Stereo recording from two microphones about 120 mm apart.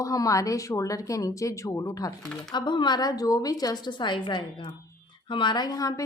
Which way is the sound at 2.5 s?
40° left (ahead or behind).